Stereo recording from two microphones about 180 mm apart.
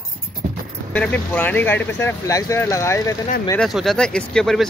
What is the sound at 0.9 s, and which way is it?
Speech, 10° left (ahead or behind).